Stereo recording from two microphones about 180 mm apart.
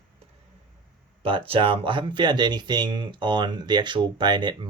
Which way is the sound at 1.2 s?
30° right (ahead or behind).